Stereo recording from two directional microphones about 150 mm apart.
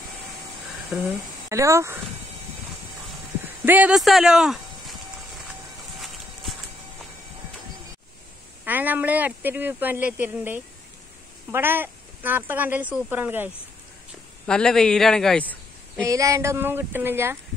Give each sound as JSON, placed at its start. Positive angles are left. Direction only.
{"t": 0.9, "sound": "speech", "side_deg": -15}
{"t": 3.4, "sound": "speech", "side_deg": -10}
{"t": 5.9, "sound": "clip-clop", "side_deg": 0}
{"t": 8.6, "sound": "speech", "side_deg": -10}
{"t": 14.4, "sound": "speech", "side_deg": 5}
{"t": 16.1, "sound": "speech", "side_deg": -20}